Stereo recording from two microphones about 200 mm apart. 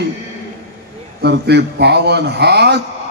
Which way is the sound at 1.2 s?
55° right (ahead or behind).